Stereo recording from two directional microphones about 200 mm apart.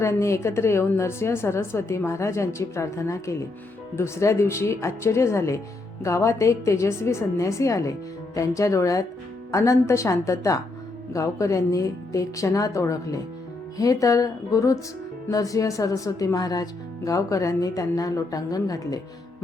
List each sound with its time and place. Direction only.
0.0 s speech: 15° left (ahead or behind)